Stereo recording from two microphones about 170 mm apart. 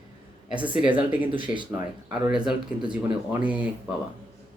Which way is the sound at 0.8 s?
30° right (ahead or behind).